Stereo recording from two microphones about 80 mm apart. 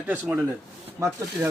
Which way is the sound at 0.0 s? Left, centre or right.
Right.